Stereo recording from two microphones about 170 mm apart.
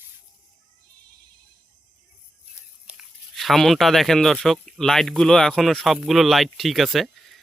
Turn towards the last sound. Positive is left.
turn(degrees=0)  # may be behind; listen again after turning